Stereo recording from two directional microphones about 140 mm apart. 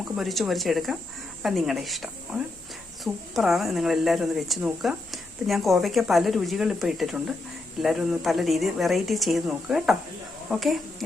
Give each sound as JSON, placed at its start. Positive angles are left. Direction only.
{"t": 0.2, "sound": "a woman's voice", "side_deg": 0}